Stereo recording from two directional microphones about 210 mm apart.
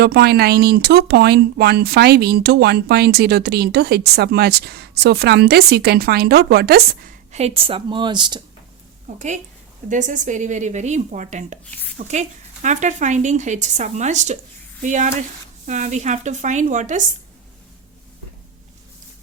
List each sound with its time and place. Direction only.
0.0 s speech: 50° right (ahead or behind); by 8.4 s 20° right (ahead or behind)
9.1 s speech: 35° right (ahead or behind)